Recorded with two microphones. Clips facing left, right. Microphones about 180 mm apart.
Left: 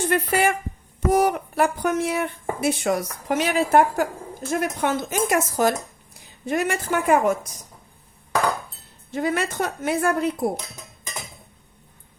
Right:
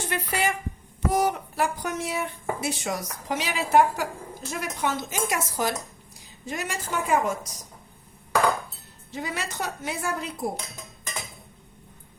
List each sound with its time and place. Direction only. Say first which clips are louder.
0.1 s speech: left 5 dB; 55° left (ahead or behind)
9.1 s speech: left 8 dB; 55° left (ahead or behind)